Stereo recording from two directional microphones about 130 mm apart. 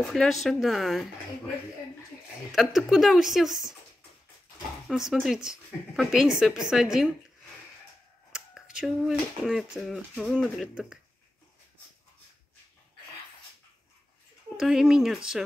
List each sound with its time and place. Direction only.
0.0 s speech: centre (ahead or behind)
2.5 s speech: centre (ahead or behind)
4.8 s speech: centre (ahead or behind)
8.3 s speech: 5° right (ahead or behind)
14.6 s speech: 5° right (ahead or behind)